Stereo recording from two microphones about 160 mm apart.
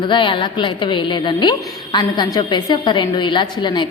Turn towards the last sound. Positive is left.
turn(degrees=30)  # may be behind; listen again after turning